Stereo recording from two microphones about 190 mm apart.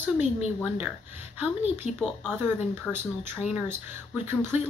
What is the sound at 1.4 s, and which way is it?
Speech, 10° right (ahead or behind).